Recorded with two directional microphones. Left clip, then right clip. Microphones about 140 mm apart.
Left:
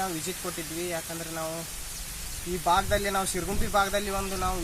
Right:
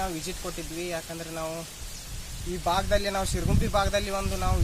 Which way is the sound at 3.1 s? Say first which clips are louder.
Even; 45° right (ahead or behind).